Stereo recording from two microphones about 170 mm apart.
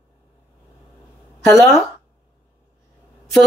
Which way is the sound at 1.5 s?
20° left (ahead or behind).